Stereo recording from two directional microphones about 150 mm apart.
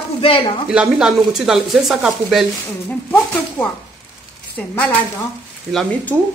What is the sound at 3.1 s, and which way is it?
Speech, 10° left (ahead or behind).